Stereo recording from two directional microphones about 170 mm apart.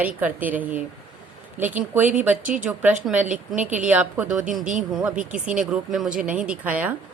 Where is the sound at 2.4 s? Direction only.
50° right (ahead or behind).